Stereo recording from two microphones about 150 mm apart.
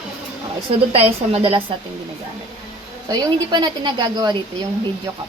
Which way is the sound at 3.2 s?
30° right (ahead or behind).